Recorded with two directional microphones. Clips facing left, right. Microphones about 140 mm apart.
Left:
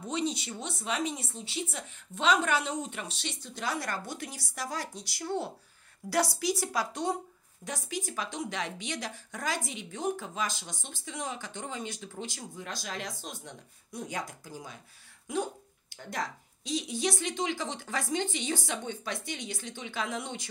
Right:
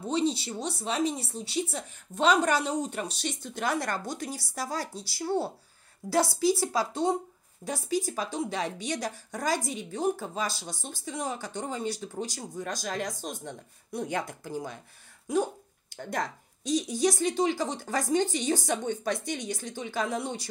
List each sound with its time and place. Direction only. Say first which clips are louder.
0.1 s speech: right 5 dB; 30° right (ahead or behind)
6.0 s speech: right 4 dB; 20° right (ahead or behind); by 14.8 s 55° right (ahead or behind)
16.0 s speech: right 4 dB; 50° right (ahead or behind)